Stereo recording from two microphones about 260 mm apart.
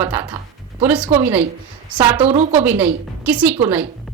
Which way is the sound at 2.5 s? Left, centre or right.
Centre.